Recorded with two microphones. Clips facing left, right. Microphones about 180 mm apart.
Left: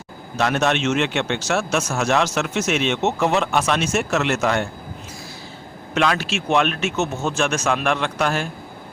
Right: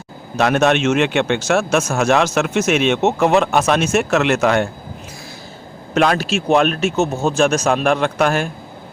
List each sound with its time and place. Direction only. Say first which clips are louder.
0.3 s speech: right 5 dB; 50° right (ahead or behind)
5.9 s speech: right 5 dB; 45° right (ahead or behind)